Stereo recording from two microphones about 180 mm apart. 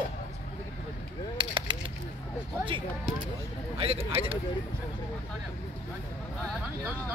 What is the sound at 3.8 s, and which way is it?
Speech, 30° right (ahead or behind).